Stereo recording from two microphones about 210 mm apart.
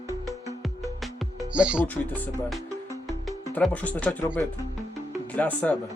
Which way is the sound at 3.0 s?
Centre (ahead or behind).